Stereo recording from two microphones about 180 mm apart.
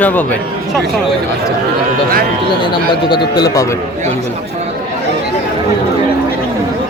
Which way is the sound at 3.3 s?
20° left (ahead or behind).